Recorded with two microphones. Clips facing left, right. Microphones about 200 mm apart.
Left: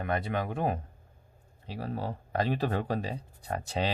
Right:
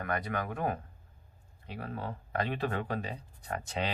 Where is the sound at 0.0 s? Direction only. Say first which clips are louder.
Left 3 dB; 25° left (ahead or behind).